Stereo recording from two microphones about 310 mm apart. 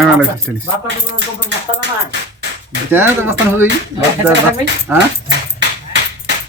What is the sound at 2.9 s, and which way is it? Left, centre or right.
Speech, centre.